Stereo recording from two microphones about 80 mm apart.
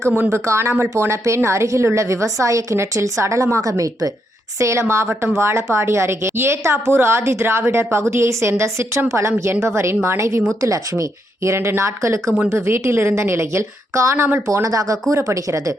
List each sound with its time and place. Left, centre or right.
0.3 s a woman's voice: right
14.4 s a woman's voice: right